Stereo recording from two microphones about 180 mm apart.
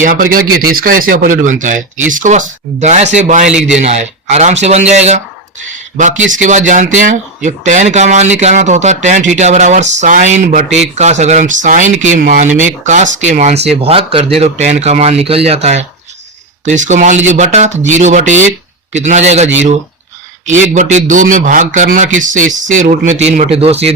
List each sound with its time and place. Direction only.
0.0 s speech: 50° right (ahead or behind)
20.7 s speech: 45° right (ahead or behind)